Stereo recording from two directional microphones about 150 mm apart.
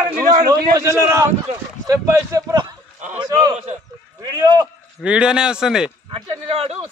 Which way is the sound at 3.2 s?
25° right (ahead or behind).